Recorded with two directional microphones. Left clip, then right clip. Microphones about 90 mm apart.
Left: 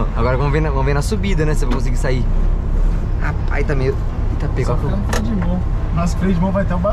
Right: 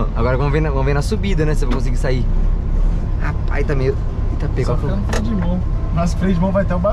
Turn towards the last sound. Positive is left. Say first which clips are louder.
# right 1 dB
turn(degrees=-5)  # may be behind; listen again after turning